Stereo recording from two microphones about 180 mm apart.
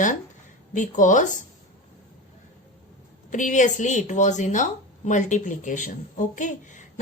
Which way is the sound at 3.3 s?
45° left (ahead or behind).